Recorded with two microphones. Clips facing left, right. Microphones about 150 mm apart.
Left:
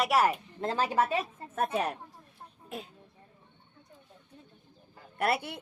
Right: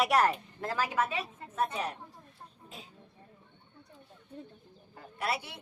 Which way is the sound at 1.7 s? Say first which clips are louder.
Left 5 dB; 60° left (ahead or behind).